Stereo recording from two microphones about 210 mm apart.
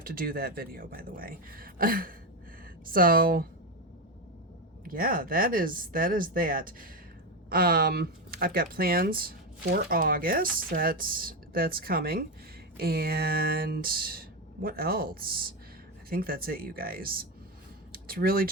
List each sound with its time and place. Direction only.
0.0 s speech: 45° right (ahead or behind)
4.9 s speech: 40° right (ahead or behind)